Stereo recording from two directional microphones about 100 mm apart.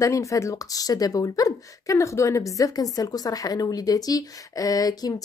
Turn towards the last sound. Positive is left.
turn(degrees=40)  # may be behind; listen again after turning